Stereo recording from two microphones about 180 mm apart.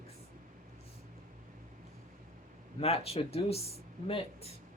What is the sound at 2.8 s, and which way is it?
A woman's voice, 35° left (ahead or behind).